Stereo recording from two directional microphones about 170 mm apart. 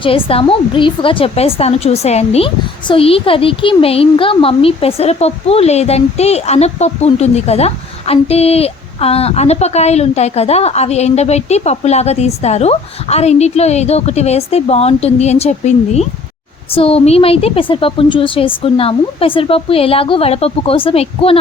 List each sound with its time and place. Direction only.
0.0 s a woman's voice: 35° left (ahead or behind)